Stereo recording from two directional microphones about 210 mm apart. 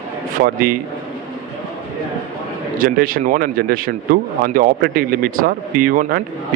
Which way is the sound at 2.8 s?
45° right (ahead or behind).